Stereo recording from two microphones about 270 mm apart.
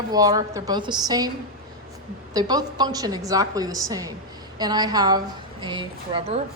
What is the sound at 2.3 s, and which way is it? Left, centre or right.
A woman's voice, centre.